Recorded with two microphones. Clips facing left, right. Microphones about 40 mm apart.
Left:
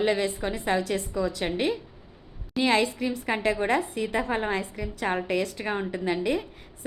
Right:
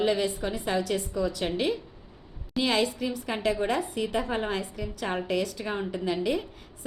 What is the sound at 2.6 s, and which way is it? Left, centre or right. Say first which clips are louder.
A woman's voice: left 2 dB; left.